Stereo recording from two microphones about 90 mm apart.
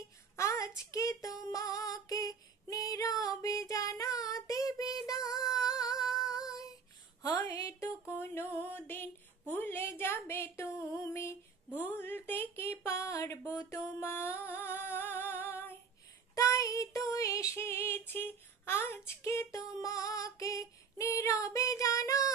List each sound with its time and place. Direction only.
0.4 s female singing: 35° left (ahead or behind)
6.2 s child singing: 40° left (ahead or behind)
7.2 s speech: 45° left (ahead or behind)
8.2 s a woman's voice: 25° left (ahead or behind)
11.9 s female singing: 25° left (ahead or behind)
13.9 s a woman's voice: 25° left (ahead or behind)
14.5 s humming: 25° left (ahead or behind)
15.4 s female singing: 25° left (ahead or behind)